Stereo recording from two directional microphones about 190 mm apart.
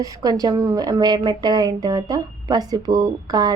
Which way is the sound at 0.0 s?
20° right (ahead or behind).